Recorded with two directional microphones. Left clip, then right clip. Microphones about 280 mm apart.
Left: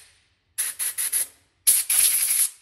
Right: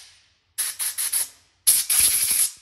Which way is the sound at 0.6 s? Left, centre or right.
Centre.